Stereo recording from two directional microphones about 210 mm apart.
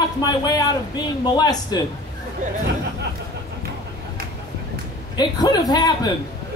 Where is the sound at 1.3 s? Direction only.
20° left (ahead or behind).